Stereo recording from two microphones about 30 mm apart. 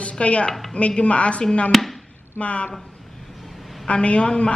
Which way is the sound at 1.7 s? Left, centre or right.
Centre.